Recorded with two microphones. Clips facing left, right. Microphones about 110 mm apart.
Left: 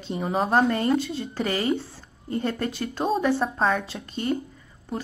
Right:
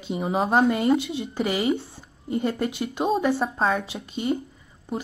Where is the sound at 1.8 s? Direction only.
15° right (ahead or behind).